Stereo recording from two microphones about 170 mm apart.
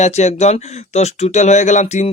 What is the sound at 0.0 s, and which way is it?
Speech, 40° left (ahead or behind).